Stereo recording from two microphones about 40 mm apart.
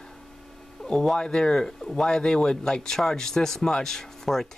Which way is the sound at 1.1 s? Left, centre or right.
Centre.